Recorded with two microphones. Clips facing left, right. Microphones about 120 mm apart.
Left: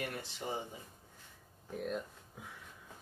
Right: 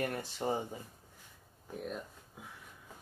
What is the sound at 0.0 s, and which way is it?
Speech, 45° right (ahead or behind).